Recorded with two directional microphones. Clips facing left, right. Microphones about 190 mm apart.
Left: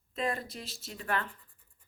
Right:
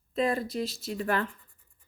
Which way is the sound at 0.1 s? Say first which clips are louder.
Right 6 dB; 35° right (ahead or behind).